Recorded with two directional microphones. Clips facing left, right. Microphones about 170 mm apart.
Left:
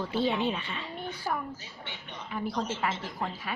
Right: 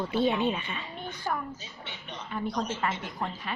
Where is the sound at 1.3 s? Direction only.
10° left (ahead or behind).